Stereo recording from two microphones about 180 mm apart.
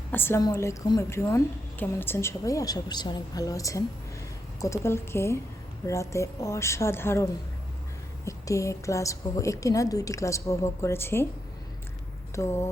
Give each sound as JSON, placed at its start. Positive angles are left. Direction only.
{"t": 0.1, "sound": "a woman's voice", "side_deg": 10}
{"t": 12.3, "sound": "a woman's voice", "side_deg": 15}